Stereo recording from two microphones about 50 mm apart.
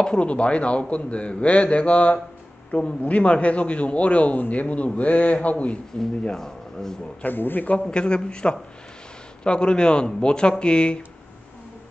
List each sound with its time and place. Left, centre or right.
0.0 s a man's voice: left
6.3 s speech: centre
7.2 s a man's voice: left
7.9 s a man's voice: centre